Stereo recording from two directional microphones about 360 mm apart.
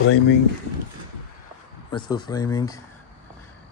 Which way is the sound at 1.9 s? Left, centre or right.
Centre.